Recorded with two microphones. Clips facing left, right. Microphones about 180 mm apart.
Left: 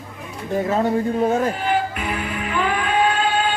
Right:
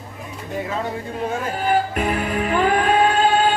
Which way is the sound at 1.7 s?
45° right (ahead or behind).